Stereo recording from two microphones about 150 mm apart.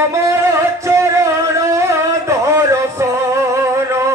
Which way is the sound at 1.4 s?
20° right (ahead or behind).